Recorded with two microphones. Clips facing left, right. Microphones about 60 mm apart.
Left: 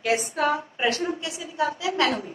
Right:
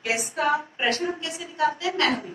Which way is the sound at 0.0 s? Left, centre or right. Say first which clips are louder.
Left 2 dB; left.